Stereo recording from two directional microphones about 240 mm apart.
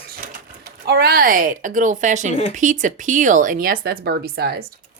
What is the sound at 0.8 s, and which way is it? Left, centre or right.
Speech, right.